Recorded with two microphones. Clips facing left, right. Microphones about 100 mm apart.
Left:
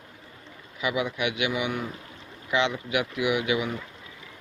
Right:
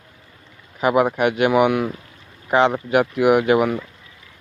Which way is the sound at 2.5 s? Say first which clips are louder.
Right 9 dB; 45° right (ahead or behind).